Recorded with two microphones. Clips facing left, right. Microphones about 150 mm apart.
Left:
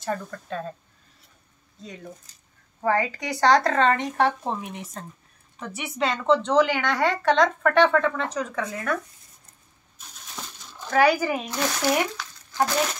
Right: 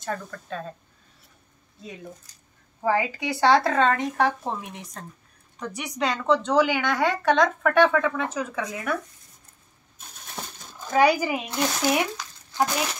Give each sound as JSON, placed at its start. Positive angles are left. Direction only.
{"t": 0.0, "sound": "a woman's voice", "side_deg": 5}
{"t": 2.8, "sound": "a woman's voice", "side_deg": -5}
{"t": 10.9, "sound": "a woman's voice", "side_deg": -15}